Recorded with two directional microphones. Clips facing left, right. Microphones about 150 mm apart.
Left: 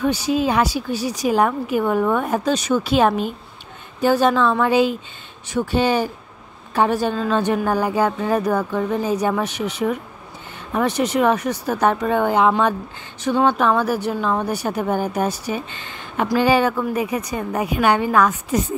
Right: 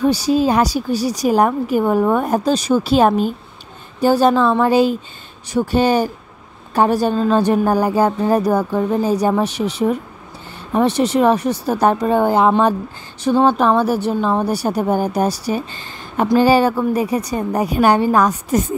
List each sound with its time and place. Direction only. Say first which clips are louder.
0.0 s a woman's voice: right 4 dB; 35° right (ahead or behind)